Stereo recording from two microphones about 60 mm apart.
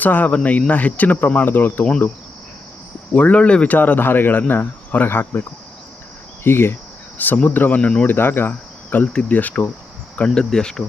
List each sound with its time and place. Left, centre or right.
0.0 s speech: left
3.1 s speech: left
6.4 s cricket: left
7.4 s speech: left
7.8 s speech: centre
8.0 s cricket: left
9.1 s speech: left
10.2 s speech: centre